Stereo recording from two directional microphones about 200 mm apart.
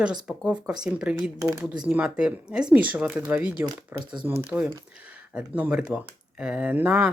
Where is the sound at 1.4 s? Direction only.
15° right (ahead or behind).